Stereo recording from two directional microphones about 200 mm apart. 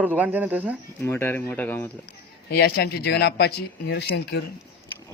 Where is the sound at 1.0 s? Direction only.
10° left (ahead or behind).